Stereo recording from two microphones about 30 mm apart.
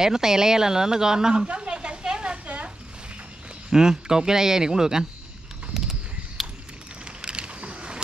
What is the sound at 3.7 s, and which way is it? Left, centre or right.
Speech, centre.